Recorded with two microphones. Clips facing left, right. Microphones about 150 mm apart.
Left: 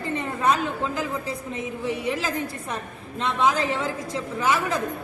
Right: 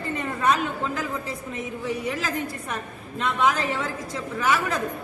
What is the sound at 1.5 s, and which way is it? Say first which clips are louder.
A woman's voice: even; 25° left (ahead or behind).